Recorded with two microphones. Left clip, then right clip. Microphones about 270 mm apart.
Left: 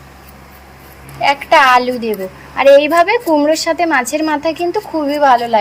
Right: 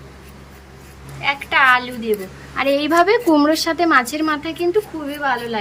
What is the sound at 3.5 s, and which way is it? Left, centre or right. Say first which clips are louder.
A woman's voice: left 2 dB; centre.